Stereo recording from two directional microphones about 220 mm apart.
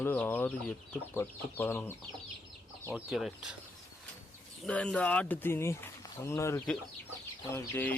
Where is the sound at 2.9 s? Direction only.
5° right (ahead or behind).